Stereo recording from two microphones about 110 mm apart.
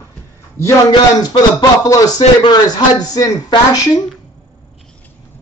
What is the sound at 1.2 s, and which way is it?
Speech, 40° left (ahead or behind).